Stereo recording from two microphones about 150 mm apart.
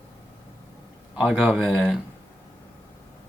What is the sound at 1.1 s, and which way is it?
Speech, 5° right (ahead or behind).